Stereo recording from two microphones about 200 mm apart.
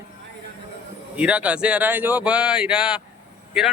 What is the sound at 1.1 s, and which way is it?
Speech, 5° right (ahead or behind).